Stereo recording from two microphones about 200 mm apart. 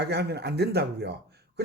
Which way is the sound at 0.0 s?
55° right (ahead or behind).